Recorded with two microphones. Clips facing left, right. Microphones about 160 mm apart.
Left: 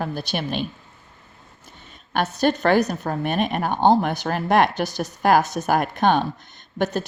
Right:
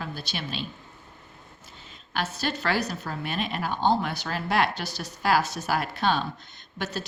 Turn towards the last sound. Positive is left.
turn(degrees=55)  # may be behind; listen again after turning